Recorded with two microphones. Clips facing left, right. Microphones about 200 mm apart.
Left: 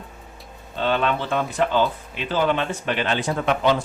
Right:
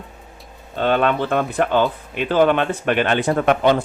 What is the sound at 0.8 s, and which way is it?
Speech, 50° right (ahead or behind).